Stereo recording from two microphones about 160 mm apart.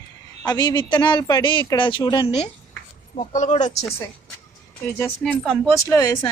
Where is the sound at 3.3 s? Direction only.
50° left (ahead or behind).